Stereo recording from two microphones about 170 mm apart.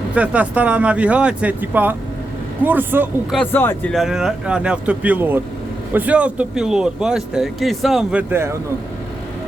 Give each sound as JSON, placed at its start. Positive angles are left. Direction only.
{"t": 0.1, "sound": "speech", "side_deg": -10}
{"t": 3.3, "sound": "speech", "side_deg": 10}
{"t": 3.9, "sound": "speech", "side_deg": -5}
{"t": 8.3, "sound": "speech", "side_deg": -15}